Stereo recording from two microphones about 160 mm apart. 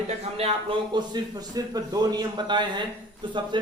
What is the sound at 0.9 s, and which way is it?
A man's voice, 25° right (ahead or behind).